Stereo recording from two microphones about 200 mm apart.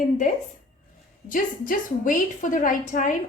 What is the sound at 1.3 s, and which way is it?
A woman's voice, 40° left (ahead or behind).